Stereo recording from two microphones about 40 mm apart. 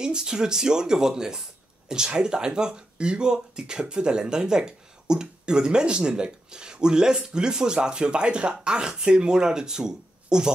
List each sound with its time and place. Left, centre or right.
0.0 s speech: centre